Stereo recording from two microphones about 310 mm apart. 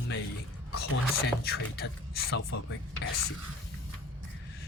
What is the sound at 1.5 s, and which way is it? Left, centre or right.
Speech, left.